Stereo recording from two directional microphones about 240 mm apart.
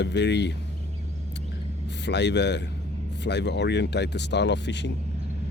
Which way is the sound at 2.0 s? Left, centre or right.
Left.